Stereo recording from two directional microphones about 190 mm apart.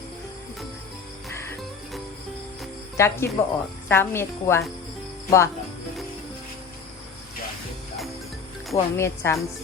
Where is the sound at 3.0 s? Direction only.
15° left (ahead or behind).